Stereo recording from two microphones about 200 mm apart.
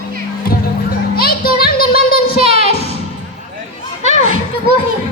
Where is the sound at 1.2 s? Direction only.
50° left (ahead or behind).